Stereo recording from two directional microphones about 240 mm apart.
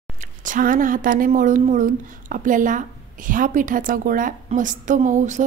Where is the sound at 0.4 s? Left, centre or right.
Right.